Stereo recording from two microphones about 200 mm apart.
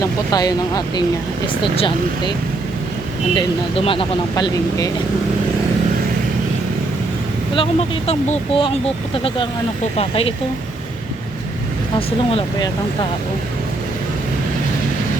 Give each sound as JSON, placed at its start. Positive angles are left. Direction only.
{"t": 0.3, "sound": "speech", "side_deg": 20}
{"t": 3.3, "sound": "speech", "side_deg": 25}
{"t": 7.5, "sound": "speech", "side_deg": 30}
{"t": 11.9, "sound": "speech", "side_deg": 25}